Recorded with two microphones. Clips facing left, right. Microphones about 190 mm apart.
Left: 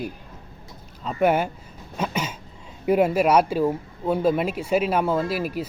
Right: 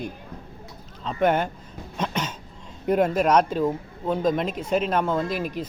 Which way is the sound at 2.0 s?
10° left (ahead or behind).